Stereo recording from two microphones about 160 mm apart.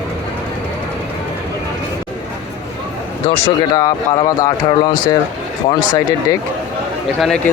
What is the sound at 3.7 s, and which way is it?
Speech, 20° left (ahead or behind).